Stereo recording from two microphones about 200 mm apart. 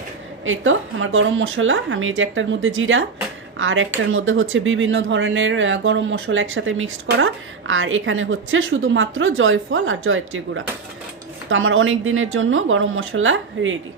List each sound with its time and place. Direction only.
0.4 s speech: 80° right